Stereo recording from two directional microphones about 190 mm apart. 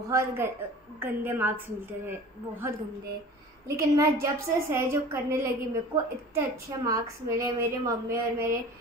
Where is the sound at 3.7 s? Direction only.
15° right (ahead or behind).